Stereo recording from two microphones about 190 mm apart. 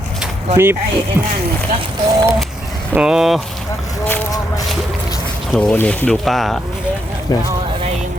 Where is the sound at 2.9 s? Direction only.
5° right (ahead or behind).